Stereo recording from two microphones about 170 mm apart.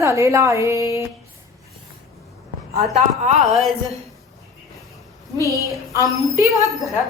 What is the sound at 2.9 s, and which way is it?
Speech, 45° right (ahead or behind).